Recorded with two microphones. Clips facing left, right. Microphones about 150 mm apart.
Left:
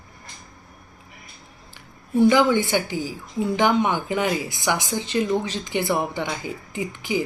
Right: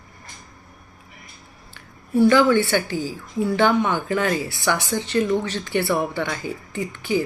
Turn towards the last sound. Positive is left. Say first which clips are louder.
# right 2 dB
turn(degrees=15)  # may be behind; listen again after turning